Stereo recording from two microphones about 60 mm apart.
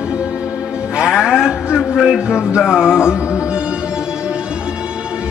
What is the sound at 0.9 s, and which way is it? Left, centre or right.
Music, centre.